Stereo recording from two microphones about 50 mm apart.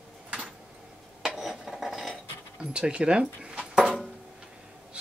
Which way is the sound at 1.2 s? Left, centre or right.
Centre.